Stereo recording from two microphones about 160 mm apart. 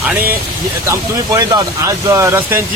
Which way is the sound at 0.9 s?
20° right (ahead or behind).